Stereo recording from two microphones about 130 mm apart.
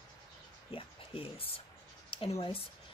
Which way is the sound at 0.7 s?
45° left (ahead or behind).